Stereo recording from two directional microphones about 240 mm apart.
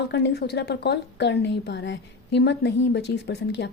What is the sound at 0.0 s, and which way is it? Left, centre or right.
A woman's voice, left.